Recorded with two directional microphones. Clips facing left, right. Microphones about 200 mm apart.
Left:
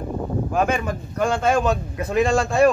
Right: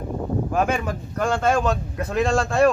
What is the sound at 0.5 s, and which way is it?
Speech, 5° right (ahead or behind).